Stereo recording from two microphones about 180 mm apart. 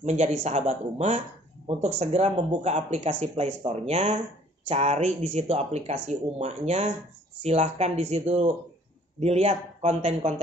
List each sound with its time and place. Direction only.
0.0 s speech: 40° right (ahead or behind)